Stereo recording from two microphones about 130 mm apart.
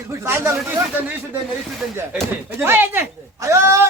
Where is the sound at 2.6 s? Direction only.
15° right (ahead or behind).